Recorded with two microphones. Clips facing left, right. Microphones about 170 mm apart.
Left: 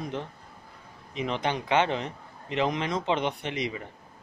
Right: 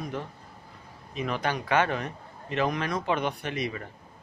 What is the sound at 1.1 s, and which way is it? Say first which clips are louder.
Speech: left 1 dB; 20° left (ahead or behind).